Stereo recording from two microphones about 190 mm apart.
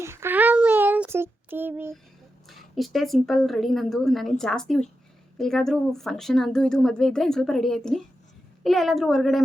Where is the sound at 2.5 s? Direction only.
Centre (ahead or behind).